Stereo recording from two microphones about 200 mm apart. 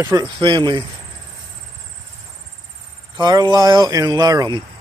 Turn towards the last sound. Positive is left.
turn(degrees=-20)  # may be behind; listen again after turning